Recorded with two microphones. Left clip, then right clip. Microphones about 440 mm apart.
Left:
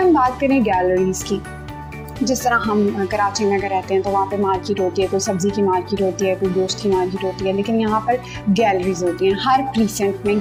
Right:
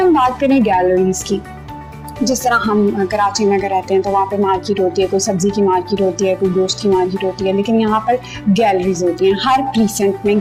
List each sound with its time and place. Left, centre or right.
0.0 s a woman's voice: right